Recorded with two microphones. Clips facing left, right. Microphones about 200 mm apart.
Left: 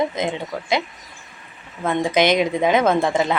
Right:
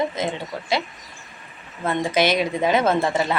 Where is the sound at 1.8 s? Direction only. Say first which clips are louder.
Left 3 dB; 15° left (ahead or behind).